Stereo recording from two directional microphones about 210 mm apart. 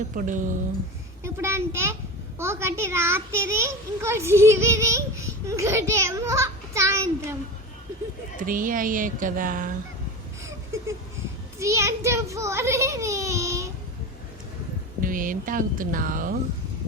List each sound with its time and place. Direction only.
0.1 s speech: 40° right (ahead or behind)
1.2 s a child's voice: 10° right (ahead or behind)
8.4 s speech: 40° right (ahead or behind)
11.6 s a child's voice: 15° right (ahead or behind)
15.0 s speech: 40° right (ahead or behind)